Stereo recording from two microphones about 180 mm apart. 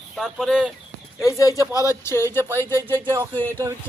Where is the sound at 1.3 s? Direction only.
20° left (ahead or behind).